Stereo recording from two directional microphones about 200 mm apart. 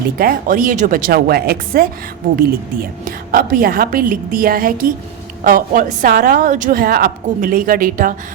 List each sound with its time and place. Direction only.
0.2 s a woman's voice: 45° right (ahead or behind)